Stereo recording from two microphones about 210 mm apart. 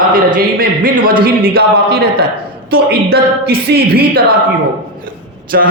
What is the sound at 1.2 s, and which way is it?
A man's voice, 45° right (ahead or behind).